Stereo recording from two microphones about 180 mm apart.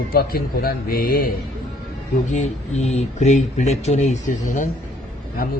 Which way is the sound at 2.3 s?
35° left (ahead or behind).